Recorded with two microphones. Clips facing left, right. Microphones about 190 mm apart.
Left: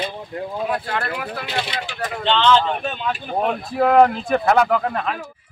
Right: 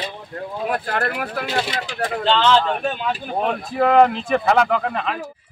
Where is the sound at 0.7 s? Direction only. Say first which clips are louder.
Right 1 dB; 45° right (ahead or behind).